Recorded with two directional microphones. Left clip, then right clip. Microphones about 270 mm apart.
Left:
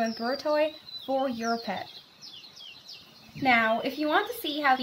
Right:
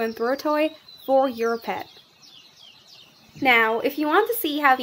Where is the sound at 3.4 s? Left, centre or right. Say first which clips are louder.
Right 5 dB; right.